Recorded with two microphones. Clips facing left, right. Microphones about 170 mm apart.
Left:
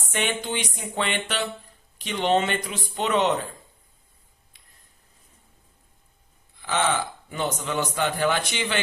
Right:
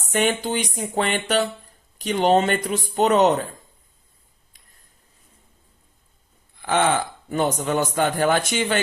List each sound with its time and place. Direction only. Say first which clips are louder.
0.0 s speech: right 6 dB; 40° right (ahead or behind)
6.6 s speech: right 4 dB; 50° right (ahead or behind)